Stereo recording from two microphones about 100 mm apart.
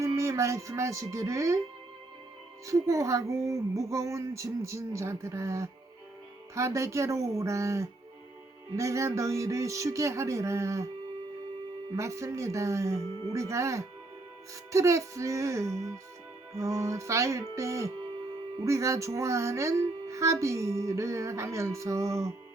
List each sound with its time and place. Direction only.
0.0 s speech: 30° right (ahead or behind)
2.6 s speech: 35° right (ahead or behind)
11.9 s speech: 30° right (ahead or behind)